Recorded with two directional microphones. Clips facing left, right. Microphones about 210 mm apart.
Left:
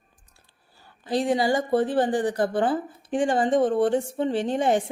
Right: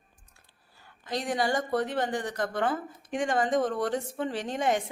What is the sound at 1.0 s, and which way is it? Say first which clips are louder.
Speech: left 6 dB; 30° left (ahead or behind).